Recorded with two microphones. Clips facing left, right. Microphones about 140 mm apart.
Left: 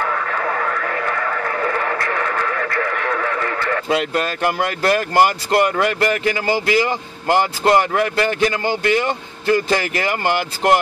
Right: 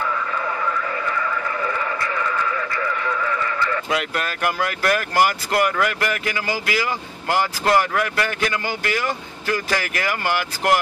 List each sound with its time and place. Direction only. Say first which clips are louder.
0.0 s radio: left 3 dB; 65° left (ahead or behind)
3.9 s speech: left 5 dB; 30° left (ahead or behind)